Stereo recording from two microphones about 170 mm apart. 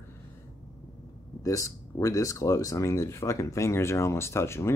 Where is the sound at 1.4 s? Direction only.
20° left (ahead or behind).